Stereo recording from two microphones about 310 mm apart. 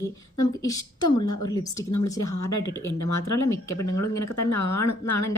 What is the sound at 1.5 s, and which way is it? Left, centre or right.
Speech, centre.